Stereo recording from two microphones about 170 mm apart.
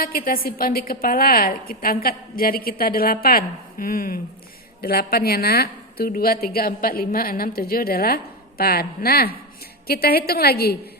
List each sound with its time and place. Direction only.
0.0 s speech: 55° left (ahead or behind)